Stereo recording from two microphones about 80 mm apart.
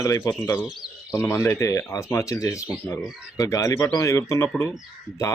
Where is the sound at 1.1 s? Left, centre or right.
Left.